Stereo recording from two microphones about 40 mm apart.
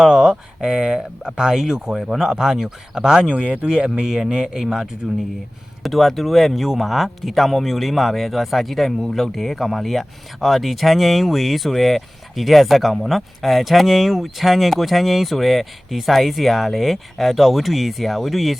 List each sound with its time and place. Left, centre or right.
0.0 s speech: centre
4.0 s speech: centre
5.8 s speech: centre